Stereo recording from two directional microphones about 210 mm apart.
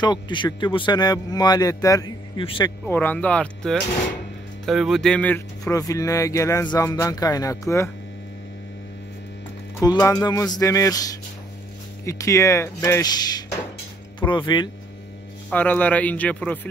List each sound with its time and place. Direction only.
0.0 s a man's voice: 20° left (ahead or behind)
2.9 s speech: 10° left (ahead or behind)
9.8 s a man's voice: 15° left (ahead or behind)
15.5 s speech: 10° left (ahead or behind)